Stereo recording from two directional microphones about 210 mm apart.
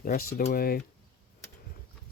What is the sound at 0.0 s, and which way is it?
Speech, 45° left (ahead or behind).